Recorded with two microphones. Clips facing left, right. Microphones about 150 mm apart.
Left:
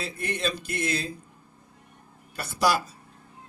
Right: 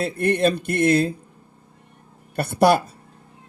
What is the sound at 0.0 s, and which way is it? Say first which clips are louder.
Speech: right 11 dB; 60° right (ahead or behind).